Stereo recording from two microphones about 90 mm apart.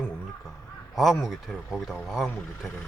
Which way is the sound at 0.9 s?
Centre (ahead or behind).